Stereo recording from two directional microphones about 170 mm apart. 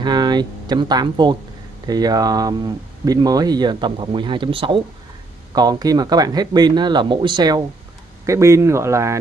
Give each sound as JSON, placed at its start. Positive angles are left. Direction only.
{"t": 0.0, "sound": "speech", "side_deg": -25}